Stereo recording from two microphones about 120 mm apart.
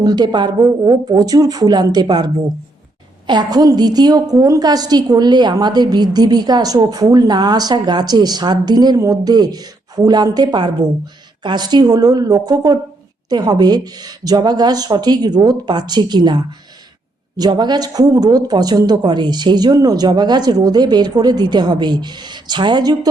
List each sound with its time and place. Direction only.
0.0 s a woman's voice: 35° right (ahead or behind)